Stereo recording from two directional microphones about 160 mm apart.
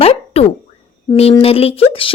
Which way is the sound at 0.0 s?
40° left (ahead or behind).